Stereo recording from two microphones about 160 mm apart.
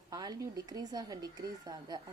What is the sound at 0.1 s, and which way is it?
Speech, 25° right (ahead or behind).